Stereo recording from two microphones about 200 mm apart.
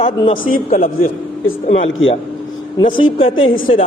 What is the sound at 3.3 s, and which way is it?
Speech, 80° left.